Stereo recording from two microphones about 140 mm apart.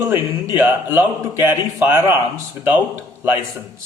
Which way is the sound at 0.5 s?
15° right (ahead or behind).